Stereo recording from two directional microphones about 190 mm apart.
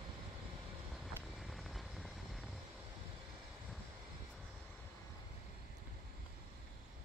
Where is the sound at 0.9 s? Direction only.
Centre (ahead or behind).